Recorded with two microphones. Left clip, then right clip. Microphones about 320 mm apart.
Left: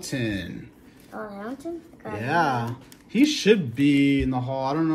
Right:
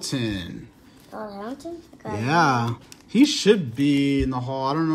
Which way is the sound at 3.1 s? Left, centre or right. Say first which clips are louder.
Right 1 dB; centre.